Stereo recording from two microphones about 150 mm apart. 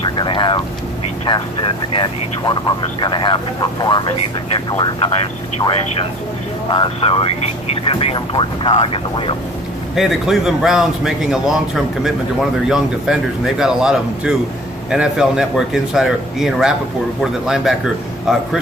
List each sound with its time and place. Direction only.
0.2 s speech: 35° left (ahead or behind)
6.7 s speech: 35° left (ahead or behind)
9.9 s a man's voice: centre (ahead or behind)